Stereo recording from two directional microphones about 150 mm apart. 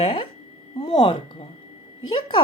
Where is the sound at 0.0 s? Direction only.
40° left (ahead or behind).